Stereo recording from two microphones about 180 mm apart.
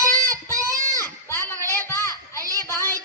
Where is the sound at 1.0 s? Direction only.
15° left (ahead or behind).